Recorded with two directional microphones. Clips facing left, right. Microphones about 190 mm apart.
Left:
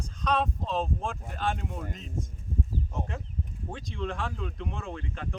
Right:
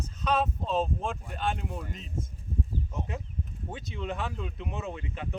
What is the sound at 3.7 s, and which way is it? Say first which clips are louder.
Speech: left 1 dB; 5° right (ahead or behind).